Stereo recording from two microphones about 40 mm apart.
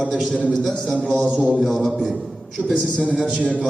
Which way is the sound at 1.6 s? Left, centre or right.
Centre.